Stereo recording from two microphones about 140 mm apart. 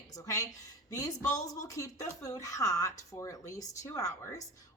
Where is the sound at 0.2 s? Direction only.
25° left (ahead or behind).